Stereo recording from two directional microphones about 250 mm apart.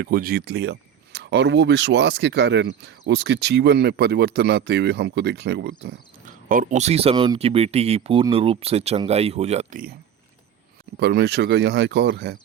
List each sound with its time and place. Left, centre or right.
0.0 s speech: right
6.5 s speech: right
10.9 s speech: right